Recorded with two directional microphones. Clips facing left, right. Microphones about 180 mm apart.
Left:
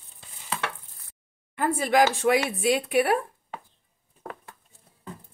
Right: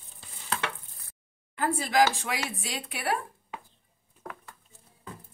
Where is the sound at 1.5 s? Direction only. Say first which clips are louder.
Left 3 dB; 55° left (ahead or behind).